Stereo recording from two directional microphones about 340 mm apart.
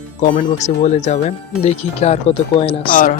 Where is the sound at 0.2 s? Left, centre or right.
Left.